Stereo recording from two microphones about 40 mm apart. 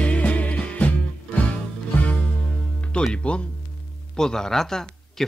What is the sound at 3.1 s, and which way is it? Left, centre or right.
Speech, left.